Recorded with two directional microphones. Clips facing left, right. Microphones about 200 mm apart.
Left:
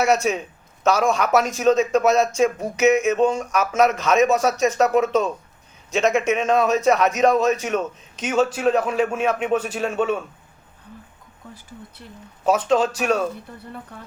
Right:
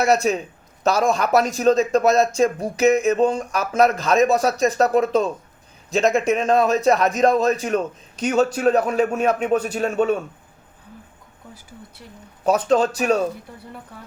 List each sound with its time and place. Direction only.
0.0 s a man's voice: 35° right (ahead or behind)
12.5 s a man's voice: 40° right (ahead or behind)